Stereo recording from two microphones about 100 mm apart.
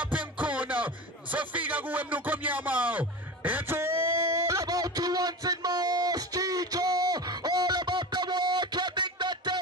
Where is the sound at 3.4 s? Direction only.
20° right (ahead or behind).